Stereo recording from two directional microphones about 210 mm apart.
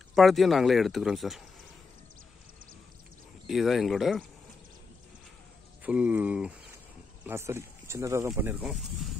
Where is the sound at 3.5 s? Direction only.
Centre (ahead or behind).